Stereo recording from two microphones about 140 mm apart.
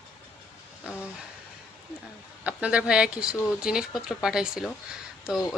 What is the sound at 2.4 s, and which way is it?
Speech, 10° right (ahead or behind).